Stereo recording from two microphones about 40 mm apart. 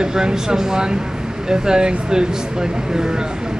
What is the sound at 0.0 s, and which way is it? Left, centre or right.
Speech, centre.